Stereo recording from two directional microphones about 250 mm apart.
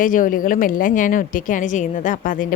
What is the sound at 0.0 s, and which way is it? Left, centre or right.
A woman's voice, left.